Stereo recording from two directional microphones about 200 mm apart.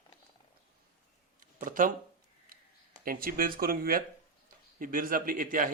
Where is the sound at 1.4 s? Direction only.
40° right (ahead or behind).